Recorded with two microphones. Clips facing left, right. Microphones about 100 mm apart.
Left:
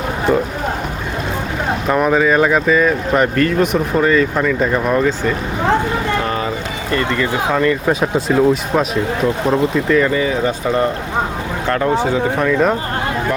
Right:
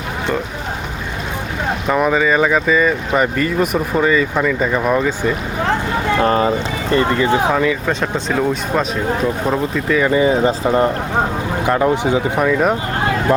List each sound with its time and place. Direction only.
1.9 s speech: centre (ahead or behind)
6.2 s speech: 35° right (ahead or behind)
7.5 s speech: 5° right (ahead or behind)
10.1 s speech: 25° right (ahead or behind)
11.6 s speech: 15° right (ahead or behind)